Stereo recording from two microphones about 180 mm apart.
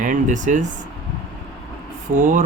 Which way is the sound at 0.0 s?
45° right (ahead or behind).